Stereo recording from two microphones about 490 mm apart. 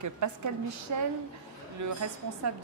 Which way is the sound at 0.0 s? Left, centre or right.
Right.